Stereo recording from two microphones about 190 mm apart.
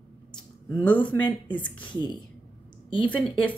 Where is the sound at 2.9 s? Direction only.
25° left (ahead or behind).